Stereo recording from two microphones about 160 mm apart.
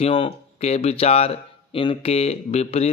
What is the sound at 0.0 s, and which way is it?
Speech, 35° left (ahead or behind).